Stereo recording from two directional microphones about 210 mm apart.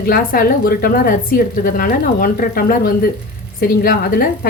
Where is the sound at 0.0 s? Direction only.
45° left (ahead or behind).